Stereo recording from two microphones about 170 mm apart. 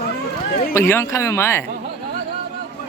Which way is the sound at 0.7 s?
15° left (ahead or behind).